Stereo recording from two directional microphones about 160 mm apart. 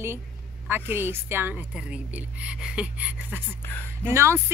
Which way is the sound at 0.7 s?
15° right (ahead or behind).